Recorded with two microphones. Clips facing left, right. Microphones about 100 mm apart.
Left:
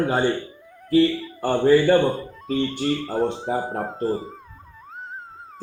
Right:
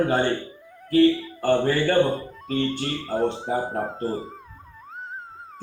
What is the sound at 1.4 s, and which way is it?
Speech, 10° left (ahead or behind).